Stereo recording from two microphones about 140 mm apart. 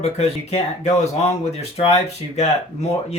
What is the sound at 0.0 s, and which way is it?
Speech, 50° left (ahead or behind).